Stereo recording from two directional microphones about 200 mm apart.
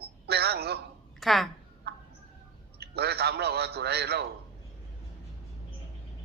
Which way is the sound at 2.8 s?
55° right (ahead or behind).